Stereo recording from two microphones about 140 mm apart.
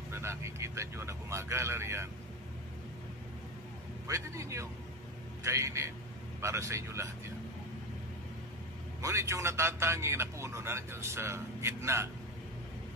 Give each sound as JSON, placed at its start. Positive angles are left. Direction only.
{"t": 0.1, "sound": "a man's voice", "side_deg": -20}
{"t": 4.1, "sound": "a man's voice", "side_deg": -20}
{"t": 9.0, "sound": "a man's voice", "side_deg": -20}